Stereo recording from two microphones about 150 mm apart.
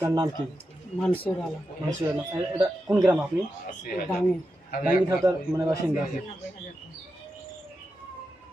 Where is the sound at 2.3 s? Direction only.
15° right (ahead or behind).